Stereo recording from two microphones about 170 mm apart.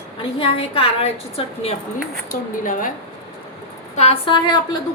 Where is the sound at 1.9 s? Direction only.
55° left (ahead or behind).